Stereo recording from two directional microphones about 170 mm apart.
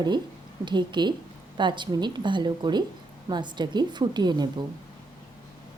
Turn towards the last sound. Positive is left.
turn(degrees=-25)  # may be behind; listen again after turning